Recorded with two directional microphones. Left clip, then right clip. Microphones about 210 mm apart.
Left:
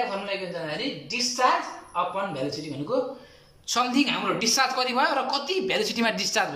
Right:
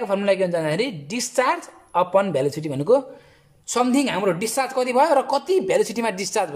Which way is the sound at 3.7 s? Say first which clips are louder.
Right 3 dB; 30° right (ahead or behind).